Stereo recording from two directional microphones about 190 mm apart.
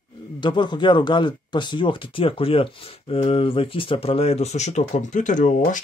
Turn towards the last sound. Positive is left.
turn(degrees=40)  # may be behind; listen again after turning